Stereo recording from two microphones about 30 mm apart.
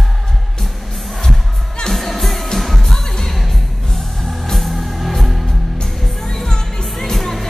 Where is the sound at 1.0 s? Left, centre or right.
Centre.